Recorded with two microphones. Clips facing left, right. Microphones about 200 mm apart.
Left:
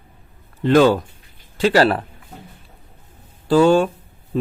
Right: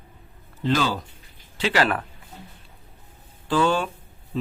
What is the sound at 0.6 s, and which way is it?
Speech, 55° left (ahead or behind).